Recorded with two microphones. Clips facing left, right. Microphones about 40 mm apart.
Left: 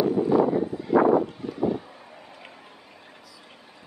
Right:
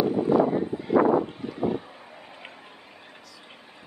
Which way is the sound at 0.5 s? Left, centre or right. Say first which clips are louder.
Left 1 dB; right.